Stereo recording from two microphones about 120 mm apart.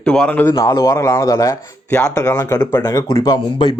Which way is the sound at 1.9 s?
5° left (ahead or behind).